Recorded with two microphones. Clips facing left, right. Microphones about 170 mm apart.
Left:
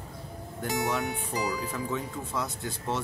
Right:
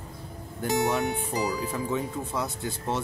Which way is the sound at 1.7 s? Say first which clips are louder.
Right 3 dB; 15° right (ahead or behind).